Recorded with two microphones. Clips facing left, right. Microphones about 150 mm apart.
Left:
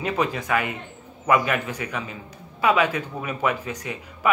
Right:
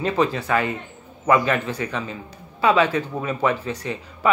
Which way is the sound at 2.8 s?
30° right (ahead or behind).